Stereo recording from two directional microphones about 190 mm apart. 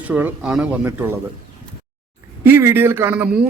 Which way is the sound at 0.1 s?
10° right (ahead or behind).